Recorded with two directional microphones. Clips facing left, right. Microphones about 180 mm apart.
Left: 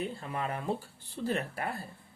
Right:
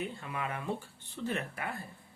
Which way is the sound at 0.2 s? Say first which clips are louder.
Left 3 dB; 35° left (ahead or behind).